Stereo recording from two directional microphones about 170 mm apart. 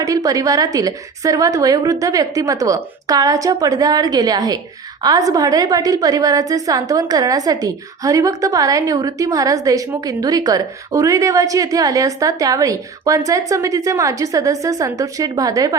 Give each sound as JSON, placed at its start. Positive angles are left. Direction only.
{"t": 0.0, "sound": "a woman's voice", "side_deg": -20}